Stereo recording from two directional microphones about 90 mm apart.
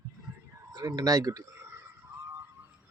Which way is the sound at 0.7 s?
45° right (ahead or behind).